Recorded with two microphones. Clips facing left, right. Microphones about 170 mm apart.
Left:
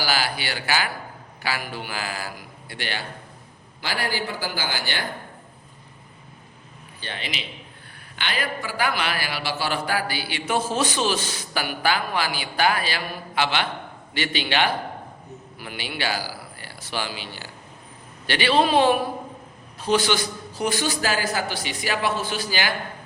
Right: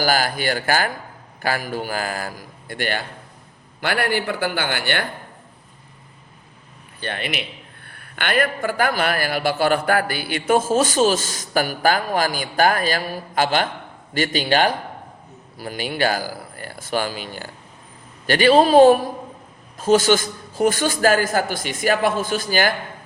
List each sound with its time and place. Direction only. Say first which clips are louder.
0.0 s a man's voice: right 6 dB; 45° right (ahead or behind)
3.8 s a man's voice: right 6 dB; 60° right (ahead or behind)
7.0 s a man's voice: right 6 dB; 55° right (ahead or behind)